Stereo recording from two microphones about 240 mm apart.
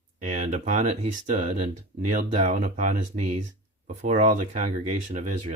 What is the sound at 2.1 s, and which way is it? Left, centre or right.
Speech, right.